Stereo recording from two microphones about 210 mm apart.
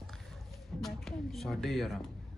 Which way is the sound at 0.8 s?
Centre (ahead or behind).